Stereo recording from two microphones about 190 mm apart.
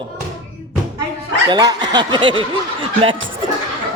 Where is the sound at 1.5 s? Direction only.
20° right (ahead or behind).